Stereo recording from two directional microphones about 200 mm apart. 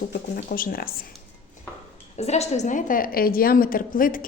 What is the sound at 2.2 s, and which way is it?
A woman's voice, 35° left (ahead or behind).